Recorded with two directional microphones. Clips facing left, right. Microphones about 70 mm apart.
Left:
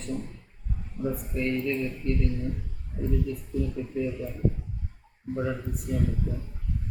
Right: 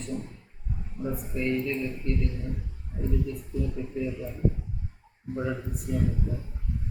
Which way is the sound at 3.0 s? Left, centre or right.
Centre.